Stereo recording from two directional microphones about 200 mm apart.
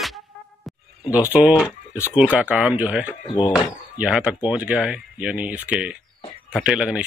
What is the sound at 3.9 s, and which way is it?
A man's voice, 5° right (ahead or behind).